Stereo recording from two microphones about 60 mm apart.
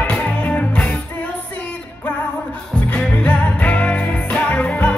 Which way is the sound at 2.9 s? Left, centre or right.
Left.